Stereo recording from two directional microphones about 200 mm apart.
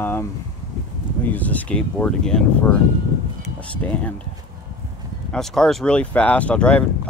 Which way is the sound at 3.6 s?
5° left (ahead or behind).